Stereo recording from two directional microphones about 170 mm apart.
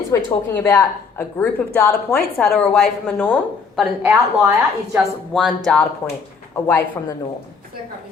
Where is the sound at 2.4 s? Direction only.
Centre (ahead or behind).